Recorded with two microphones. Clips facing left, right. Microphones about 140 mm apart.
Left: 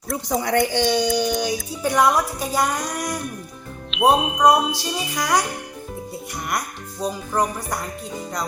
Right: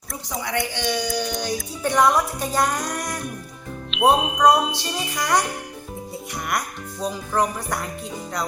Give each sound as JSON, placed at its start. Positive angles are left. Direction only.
{"t": 0.3, "sound": "speech", "side_deg": 45}
{"t": 0.8, "sound": "a sound", "side_deg": 25}
{"t": 1.5, "sound": "music", "side_deg": 5}
{"t": 7.0, "sound": "music", "side_deg": 0}